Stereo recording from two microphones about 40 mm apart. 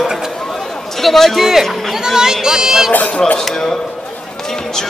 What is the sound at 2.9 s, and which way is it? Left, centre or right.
Speech, left.